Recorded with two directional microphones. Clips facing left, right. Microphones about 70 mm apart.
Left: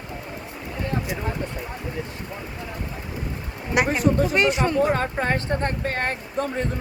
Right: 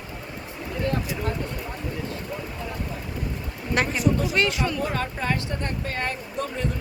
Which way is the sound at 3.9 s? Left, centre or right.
Left.